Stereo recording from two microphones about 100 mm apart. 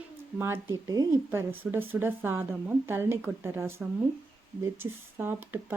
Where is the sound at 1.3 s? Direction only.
20° right (ahead or behind).